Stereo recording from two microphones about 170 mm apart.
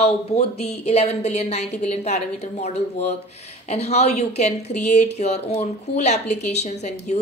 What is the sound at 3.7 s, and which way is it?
A woman's voice, 40° left (ahead or behind).